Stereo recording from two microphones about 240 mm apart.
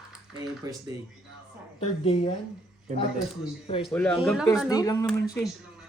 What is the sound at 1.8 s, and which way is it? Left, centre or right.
Speech, left.